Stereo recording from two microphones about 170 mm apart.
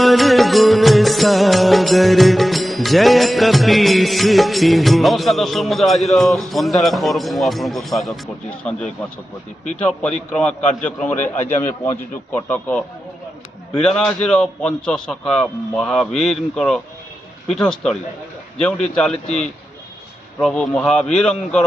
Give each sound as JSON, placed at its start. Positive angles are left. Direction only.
{"t": 0.0, "sound": "music", "side_deg": 0}
{"t": 9.8, "sound": "a man's voice", "side_deg": 5}
{"t": 13.7, "sound": "music", "side_deg": 5}
{"t": 20.3, "sound": "music", "side_deg": 5}